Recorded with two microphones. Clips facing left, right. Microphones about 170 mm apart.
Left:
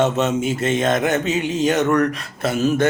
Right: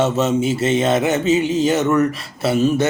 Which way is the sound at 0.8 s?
10° right (ahead or behind).